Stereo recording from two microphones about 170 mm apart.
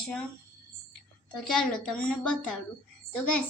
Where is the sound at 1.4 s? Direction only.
Centre (ahead or behind).